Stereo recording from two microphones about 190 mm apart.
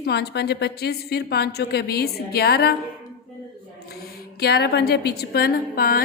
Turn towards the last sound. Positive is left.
turn(degrees=50)  # may be behind; listen again after turning